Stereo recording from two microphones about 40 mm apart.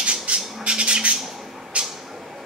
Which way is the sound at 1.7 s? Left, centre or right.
Right.